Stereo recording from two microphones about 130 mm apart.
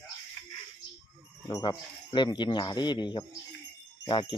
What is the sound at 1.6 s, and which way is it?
Speech, 35° left (ahead or behind).